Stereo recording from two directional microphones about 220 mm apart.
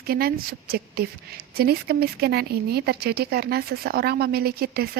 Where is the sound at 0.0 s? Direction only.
45° right (ahead or behind).